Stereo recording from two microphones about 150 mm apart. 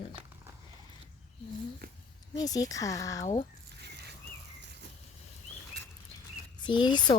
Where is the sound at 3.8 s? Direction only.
90° right.